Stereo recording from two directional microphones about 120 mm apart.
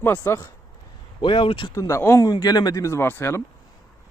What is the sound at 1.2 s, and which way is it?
Speech, 45° left (ahead or behind).